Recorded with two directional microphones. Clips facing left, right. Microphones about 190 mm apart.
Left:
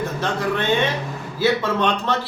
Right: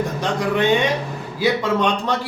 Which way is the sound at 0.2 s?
15° right (ahead or behind).